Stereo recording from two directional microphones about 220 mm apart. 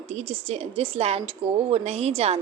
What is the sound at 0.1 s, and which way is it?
A woman's voice, 30° right (ahead or behind).